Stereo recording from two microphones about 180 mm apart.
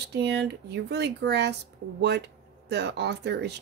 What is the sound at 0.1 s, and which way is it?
Speech, 70° right (ahead or behind).